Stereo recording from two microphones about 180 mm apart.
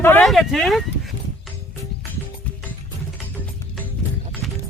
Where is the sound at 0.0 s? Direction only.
10° left (ahead or behind).